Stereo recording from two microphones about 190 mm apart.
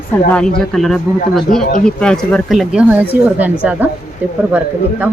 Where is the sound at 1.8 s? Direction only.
5° left (ahead or behind).